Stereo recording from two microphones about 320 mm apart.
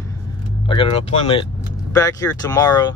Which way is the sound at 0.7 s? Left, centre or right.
Centre.